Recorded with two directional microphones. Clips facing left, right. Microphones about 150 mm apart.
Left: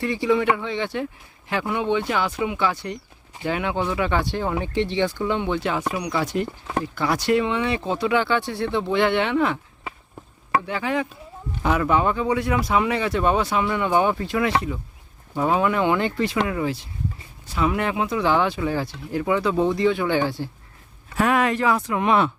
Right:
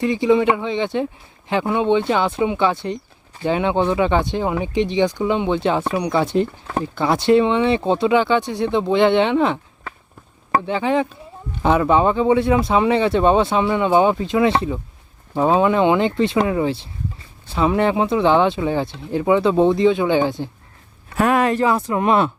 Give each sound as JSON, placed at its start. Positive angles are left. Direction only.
{"t": 0.0, "sound": "speech", "side_deg": -20}
{"t": 10.7, "sound": "speech", "side_deg": -25}
{"t": 21.2, "sound": "speech", "side_deg": -40}